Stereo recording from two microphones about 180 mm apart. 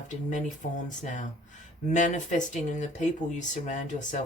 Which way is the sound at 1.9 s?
45° left (ahead or behind).